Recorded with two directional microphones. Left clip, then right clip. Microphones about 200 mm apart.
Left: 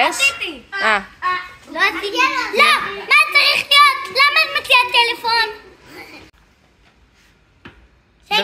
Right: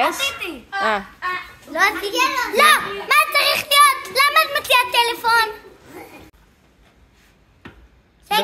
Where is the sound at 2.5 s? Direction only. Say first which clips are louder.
Right 1 dB; 20° right (ahead or behind).